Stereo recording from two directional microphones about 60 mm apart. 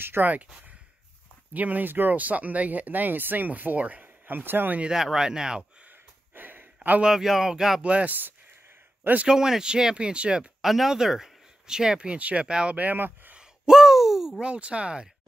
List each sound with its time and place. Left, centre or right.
0.0 s speech: right
1.5 s speech: right
4.9 s speech: centre
5.9 s a sound: right
7.0 s speech: centre
7.8 s speech: right
9.3 s speech: centre
10.6 s speech: centre; by 13.4 s right
13.4 s a sound: centre
14.4 s speech: centre